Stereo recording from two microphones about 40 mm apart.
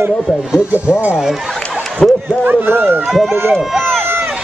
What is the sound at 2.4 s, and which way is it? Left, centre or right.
Speech, right.